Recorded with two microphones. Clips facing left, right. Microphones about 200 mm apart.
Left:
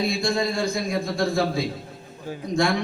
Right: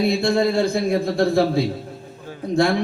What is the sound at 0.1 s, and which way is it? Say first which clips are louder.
A man's voice: right 6 dB; 60° right (ahead or behind).